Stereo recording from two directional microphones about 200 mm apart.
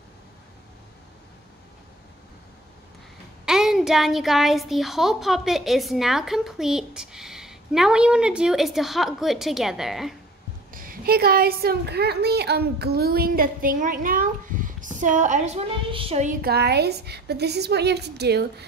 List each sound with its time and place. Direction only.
3.4 s a woman's voice: centre (ahead or behind)
10.7 s a woman's voice: 45° right (ahead or behind)
16.3 s a woman's voice: 50° right (ahead or behind)